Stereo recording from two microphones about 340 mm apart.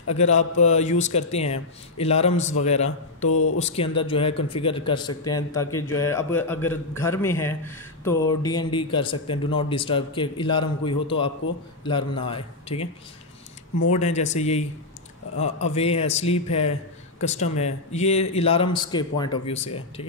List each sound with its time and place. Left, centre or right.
0.2 s a man's voice: centre
3.3 s mantra: left
3.5 s a man's voice: centre
13.9 s a man's voice: centre